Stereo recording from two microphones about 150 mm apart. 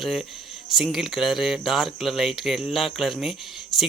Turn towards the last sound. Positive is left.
turn(degrees=0)  # may be behind; listen again after turning